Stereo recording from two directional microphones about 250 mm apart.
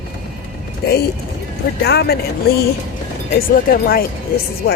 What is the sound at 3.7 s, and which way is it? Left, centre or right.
Speech, left.